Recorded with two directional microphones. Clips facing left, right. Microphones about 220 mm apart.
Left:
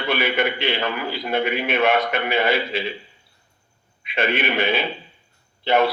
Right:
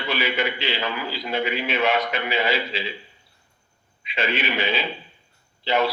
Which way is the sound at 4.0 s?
55° left (ahead or behind).